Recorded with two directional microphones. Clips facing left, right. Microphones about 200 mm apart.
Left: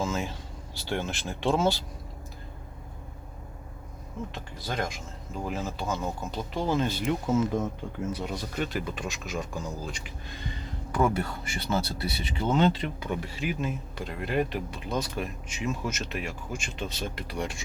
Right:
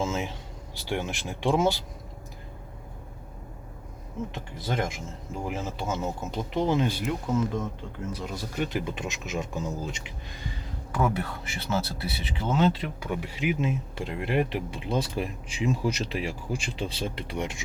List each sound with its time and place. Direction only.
0.0 s a sound: 20° right (ahead or behind)
0.8 s speech: 15° right (ahead or behind)
4.5 s speech: 25° right (ahead or behind)
7.0 s speech: 5° left (ahead or behind)
8.5 s speech: 15° right (ahead or behind)
10.9 s speech: centre (ahead or behind); by 17.6 s 20° right (ahead or behind)